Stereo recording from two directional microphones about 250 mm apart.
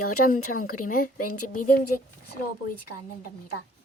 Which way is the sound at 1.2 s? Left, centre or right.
Left.